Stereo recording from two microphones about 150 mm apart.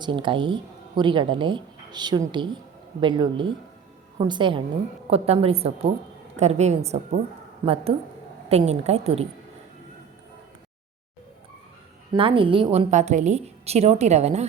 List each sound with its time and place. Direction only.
0.0 s a woman's voice: 35° right (ahead or behind)
12.1 s speech: 35° right (ahead or behind)
12.9 s a woman's voice: 50° right (ahead or behind)